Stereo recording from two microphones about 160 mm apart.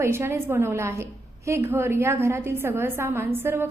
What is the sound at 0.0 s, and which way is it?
A woman's voice, 15° right (ahead or behind).